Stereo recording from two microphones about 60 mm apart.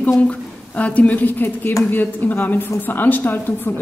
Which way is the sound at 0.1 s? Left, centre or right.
Left.